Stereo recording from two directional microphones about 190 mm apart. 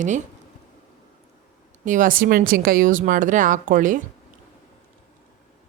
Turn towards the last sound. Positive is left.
turn(degrees=-45)  # may be behind; listen again after turning